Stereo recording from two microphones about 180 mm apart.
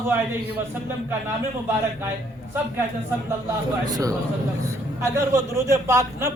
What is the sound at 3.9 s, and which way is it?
A man's voice, 20° right (ahead or behind).